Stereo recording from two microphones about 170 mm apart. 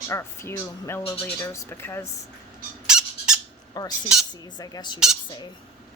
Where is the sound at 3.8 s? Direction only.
25° left (ahead or behind).